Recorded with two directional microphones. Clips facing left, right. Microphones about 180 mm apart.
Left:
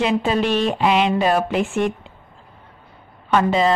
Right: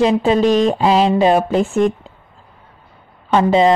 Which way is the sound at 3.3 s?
25° right (ahead or behind).